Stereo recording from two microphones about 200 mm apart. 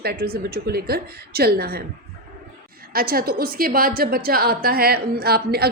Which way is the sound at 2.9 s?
50° right (ahead or behind).